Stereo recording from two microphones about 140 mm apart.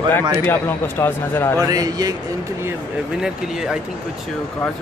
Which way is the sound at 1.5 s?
25° right (ahead or behind).